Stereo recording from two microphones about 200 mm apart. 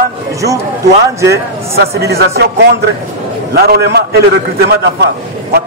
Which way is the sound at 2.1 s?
55° right (ahead or behind).